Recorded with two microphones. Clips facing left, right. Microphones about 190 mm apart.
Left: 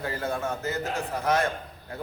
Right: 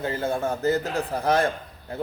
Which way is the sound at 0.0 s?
25° right (ahead or behind).